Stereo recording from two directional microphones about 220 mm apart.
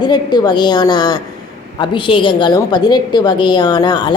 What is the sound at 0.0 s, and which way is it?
A woman's voice, 20° left (ahead or behind).